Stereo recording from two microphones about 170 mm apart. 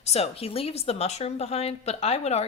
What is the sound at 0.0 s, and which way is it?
Speech, 35° left (ahead or behind).